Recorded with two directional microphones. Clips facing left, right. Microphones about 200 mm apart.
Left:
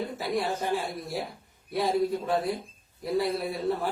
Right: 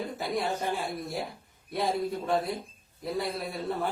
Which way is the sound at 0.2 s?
Centre (ahead or behind).